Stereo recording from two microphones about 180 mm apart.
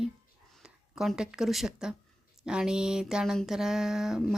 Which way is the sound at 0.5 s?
Centre (ahead or behind).